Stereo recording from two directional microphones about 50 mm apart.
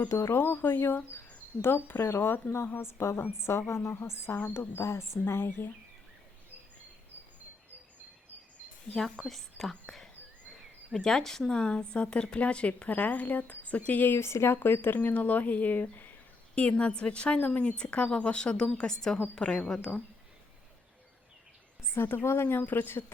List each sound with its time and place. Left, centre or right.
0.1 s speech: left
0.3 s a woman's voice: left
3.7 s a woman's voice: left
4.5 s speech: left
4.8 s speech: left
5.2 s speech: left
8.9 s speech: centre
11.5 s speech: centre; by 14.2 s left
14.2 s speech: left
14.9 s speech: left
16.6 s speech: left
21.9 s speech: left